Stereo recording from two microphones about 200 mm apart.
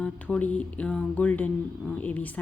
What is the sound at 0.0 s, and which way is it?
Music, 5° left (ahead or behind).